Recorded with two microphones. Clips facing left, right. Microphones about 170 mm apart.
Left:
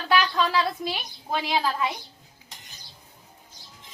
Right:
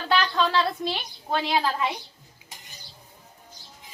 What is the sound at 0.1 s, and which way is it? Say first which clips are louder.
A woman's voice: even; 5° left (ahead or behind).